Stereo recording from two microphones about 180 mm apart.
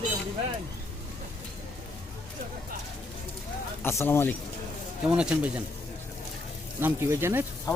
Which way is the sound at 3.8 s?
15° left (ahead or behind).